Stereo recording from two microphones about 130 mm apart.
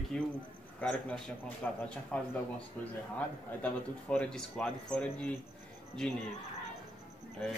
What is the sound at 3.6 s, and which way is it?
A man's voice, 10° left (ahead or behind).